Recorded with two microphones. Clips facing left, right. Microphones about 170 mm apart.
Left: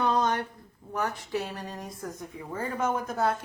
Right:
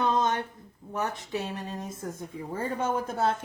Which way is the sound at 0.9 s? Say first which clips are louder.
Left 1 dB; 20° right (ahead or behind).